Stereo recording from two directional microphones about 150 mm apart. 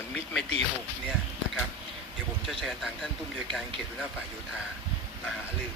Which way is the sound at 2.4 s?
Centre (ahead or behind).